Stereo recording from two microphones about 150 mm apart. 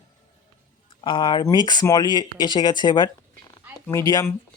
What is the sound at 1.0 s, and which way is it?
Speech, 30° left (ahead or behind).